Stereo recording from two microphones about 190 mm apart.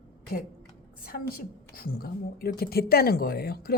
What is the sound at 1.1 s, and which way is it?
A woman's voice, 50° left (ahead or behind).